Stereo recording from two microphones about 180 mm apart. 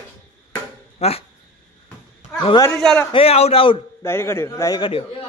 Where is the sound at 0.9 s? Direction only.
35° left (ahead or behind).